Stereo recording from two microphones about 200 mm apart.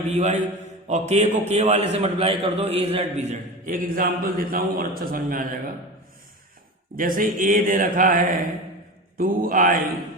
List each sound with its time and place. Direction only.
0.2 s a man's voice: 35° right (ahead or behind)
6.9 s speech: 45° right (ahead or behind)